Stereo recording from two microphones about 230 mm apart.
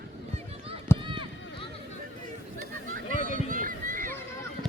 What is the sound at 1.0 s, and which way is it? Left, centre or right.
Run, right.